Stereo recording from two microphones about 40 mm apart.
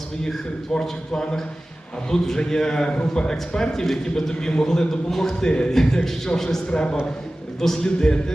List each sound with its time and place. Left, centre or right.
0.7 s a man's voice: centre
5.5 s a man's voice: left
6.7 s a man's voice: left
7.6 s a man's voice: centre
7.9 s a man's voice: left